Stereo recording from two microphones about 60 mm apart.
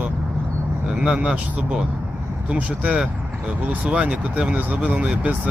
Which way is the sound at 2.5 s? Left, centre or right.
Right.